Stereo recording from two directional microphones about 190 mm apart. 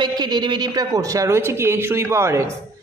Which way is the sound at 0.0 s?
20° right (ahead or behind).